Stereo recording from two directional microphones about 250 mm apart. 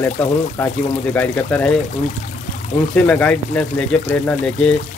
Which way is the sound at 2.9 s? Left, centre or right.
Centre.